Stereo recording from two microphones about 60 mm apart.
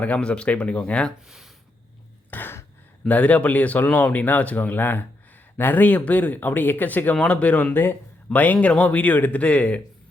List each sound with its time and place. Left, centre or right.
0.0 s speech: left
2.3 s a sound: left
3.0 s speech: left
7.7 s speech: left